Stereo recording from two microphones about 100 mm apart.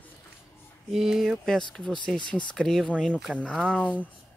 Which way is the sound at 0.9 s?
5° right (ahead or behind).